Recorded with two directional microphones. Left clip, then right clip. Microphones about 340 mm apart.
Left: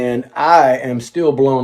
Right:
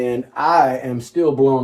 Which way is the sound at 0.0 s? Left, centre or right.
Centre.